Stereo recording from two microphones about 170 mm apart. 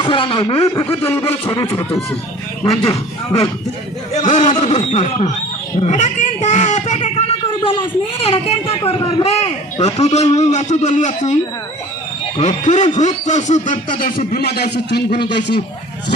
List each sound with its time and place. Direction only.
0.0 s speech: 30° left (ahead or behind)
1.0 s a man's voice: 15° left (ahead or behind)
2.6 s a man's voice: 35° left (ahead or behind)
12.4 s speech: 40° left (ahead or behind); by 15.2 s 80° left